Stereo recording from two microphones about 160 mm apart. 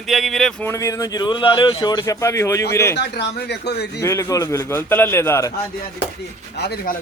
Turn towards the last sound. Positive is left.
turn(degrees=90)